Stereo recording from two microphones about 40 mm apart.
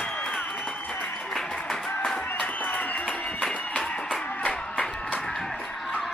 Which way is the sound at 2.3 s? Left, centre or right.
Left.